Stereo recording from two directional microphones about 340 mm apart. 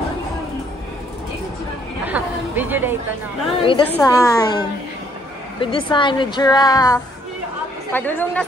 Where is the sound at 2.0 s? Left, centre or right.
Centre.